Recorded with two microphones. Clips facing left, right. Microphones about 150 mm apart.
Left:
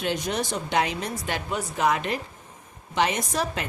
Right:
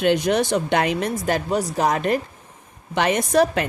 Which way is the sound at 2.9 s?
60° right (ahead or behind).